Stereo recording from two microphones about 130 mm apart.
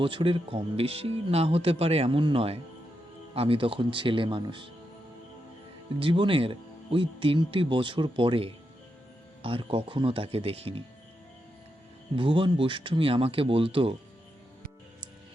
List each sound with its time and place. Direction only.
0.0 s speech: 40° right (ahead or behind)
6.0 s speech: 40° right (ahead or behind)
12.1 s speech: 40° right (ahead or behind)